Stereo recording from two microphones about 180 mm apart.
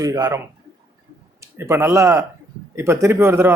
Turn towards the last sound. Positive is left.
turn(degrees=-15)  # may be behind; listen again after turning